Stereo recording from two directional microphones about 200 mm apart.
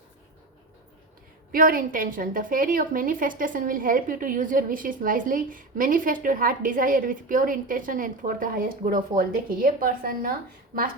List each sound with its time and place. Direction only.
1.5 s a woman's voice: 45° right (ahead or behind)